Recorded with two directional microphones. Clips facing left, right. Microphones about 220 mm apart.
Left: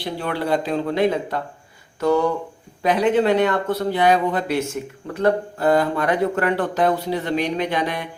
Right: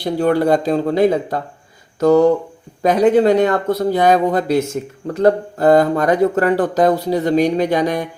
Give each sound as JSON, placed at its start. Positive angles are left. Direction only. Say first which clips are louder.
{"t": 0.0, "sound": "speech", "louder": "right 10 dB", "side_deg": -45}